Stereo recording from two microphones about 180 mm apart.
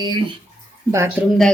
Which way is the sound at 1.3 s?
Centre (ahead or behind).